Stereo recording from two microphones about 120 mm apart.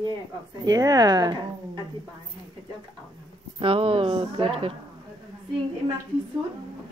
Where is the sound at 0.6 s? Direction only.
30° right (ahead or behind).